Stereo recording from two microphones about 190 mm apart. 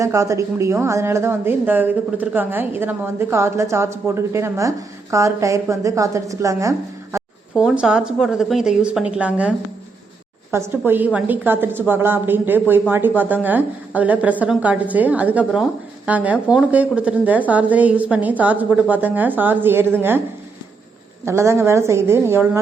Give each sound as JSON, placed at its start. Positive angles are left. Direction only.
{"t": 0.0, "sound": "a woman's voice", "side_deg": -15}
{"t": 7.5, "sound": "a woman's voice", "side_deg": -5}
{"t": 21.2, "sound": "a woman's voice", "side_deg": -15}